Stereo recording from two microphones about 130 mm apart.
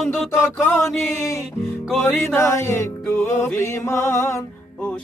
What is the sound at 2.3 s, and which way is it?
Music, 20° left (ahead or behind).